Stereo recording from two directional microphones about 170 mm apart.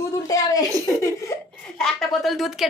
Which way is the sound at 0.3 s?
20° left (ahead or behind).